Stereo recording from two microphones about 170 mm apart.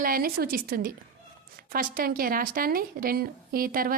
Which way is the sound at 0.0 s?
60° right (ahead or behind).